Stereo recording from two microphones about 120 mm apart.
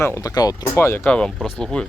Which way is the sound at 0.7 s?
20° left (ahead or behind).